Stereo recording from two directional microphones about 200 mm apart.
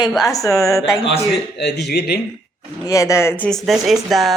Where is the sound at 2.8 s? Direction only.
15° left (ahead or behind); by 4.4 s centre (ahead or behind).